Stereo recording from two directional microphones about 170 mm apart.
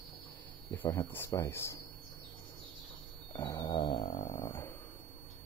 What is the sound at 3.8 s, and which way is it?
Dog, 35° left (ahead or behind).